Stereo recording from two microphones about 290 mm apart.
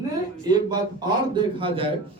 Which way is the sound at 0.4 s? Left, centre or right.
Centre.